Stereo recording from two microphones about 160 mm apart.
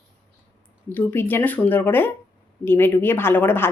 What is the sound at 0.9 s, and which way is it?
A woman's voice, 10° left (ahead or behind).